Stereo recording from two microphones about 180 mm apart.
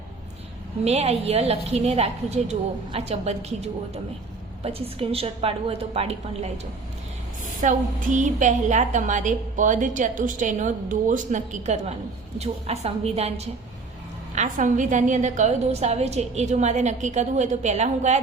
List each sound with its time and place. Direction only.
0.9 s a woman's voice: 35° right (ahead or behind)
7.6 s a woman's voice: 45° right (ahead or behind)